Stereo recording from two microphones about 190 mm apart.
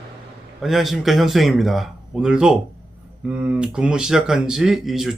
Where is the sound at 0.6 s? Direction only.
Centre (ahead or behind).